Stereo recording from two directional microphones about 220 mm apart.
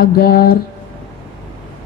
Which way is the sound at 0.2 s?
40° left (ahead or behind).